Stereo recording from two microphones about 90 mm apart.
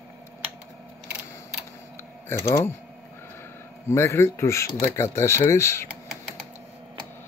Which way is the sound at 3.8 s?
30° left (ahead or behind).